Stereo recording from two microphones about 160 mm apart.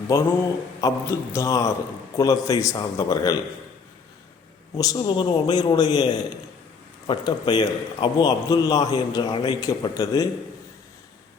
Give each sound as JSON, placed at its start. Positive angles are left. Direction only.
{"t": 0.1, "sound": "a man's voice", "side_deg": 20}
{"t": 4.8, "sound": "a man's voice", "side_deg": 25}